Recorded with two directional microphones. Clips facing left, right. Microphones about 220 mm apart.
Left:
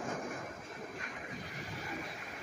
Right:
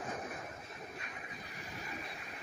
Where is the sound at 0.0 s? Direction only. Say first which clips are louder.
Left 3 dB; 50° left (ahead or behind).